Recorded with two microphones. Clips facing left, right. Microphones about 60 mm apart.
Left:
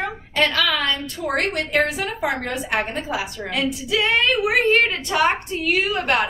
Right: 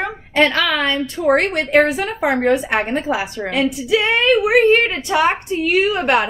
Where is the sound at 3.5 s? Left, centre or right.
Centre.